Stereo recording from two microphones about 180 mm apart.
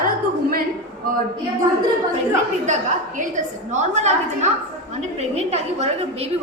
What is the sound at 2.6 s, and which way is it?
A woman's voice, 45° right (ahead or behind).